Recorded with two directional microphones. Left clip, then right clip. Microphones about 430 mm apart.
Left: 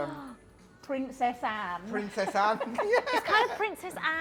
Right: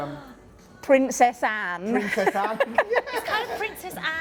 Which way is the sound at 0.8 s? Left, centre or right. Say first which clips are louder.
Right 12 dB; right.